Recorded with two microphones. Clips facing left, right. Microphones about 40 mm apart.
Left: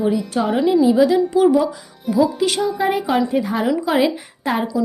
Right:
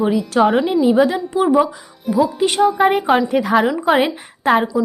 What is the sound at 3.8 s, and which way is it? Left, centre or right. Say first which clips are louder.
Speech: right 2 dB; right.